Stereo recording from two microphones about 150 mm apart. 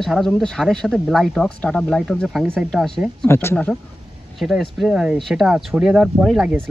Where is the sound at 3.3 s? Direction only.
15° left (ahead or behind).